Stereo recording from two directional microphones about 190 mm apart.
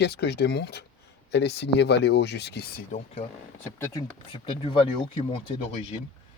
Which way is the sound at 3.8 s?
15° left (ahead or behind).